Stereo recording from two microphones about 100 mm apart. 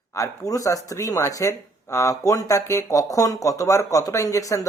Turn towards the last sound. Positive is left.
turn(degrees=35)  # may be behind; listen again after turning